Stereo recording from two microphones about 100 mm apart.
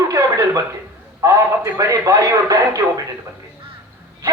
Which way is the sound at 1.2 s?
30° right (ahead or behind).